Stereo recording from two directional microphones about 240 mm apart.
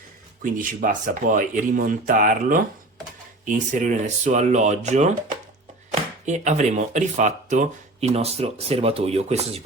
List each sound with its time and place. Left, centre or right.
0.4 s speech: right